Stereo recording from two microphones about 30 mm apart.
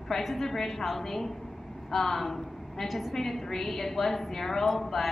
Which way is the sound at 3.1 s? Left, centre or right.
Centre.